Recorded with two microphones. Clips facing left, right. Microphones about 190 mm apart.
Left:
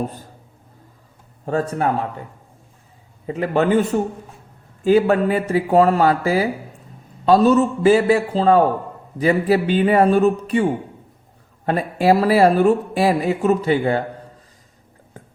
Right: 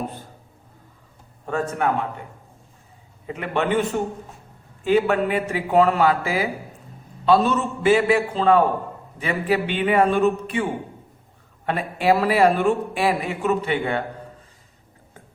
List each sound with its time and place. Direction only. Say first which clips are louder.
1.5 s speech: left 3 dB; 35° left (ahead or behind)
3.2 s speech: left 5 dB; 35° left (ahead or behind)